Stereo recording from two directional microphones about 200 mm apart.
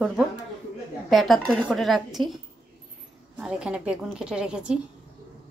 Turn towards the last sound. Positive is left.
turn(degrees=-5)  # may be behind; listen again after turning